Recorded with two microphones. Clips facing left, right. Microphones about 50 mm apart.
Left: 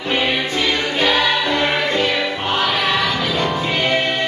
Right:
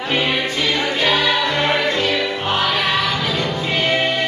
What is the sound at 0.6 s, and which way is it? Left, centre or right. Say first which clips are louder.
Choir: left 1 dB; centre.